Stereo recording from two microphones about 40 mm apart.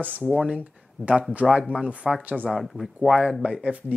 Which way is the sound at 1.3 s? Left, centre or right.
Right.